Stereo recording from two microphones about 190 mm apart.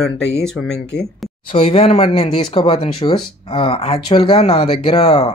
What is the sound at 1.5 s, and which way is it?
Speech, 30° left (ahead or behind).